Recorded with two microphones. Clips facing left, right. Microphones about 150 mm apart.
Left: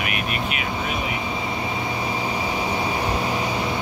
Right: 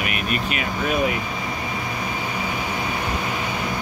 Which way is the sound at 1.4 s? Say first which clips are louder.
Left 2 dB; 25° left (ahead or behind).